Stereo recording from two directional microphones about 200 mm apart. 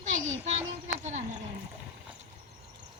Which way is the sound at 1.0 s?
35° right (ahead or behind).